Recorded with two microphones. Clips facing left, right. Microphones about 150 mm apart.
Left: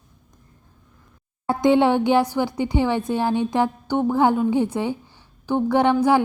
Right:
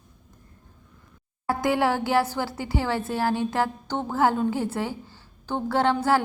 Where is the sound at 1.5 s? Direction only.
20° left (ahead or behind).